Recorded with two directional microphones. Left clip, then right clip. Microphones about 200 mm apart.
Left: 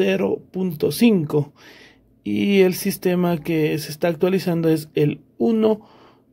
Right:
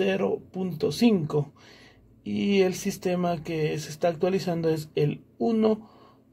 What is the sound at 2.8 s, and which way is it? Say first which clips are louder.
Speech: left 6 dB; 60° left (ahead or behind).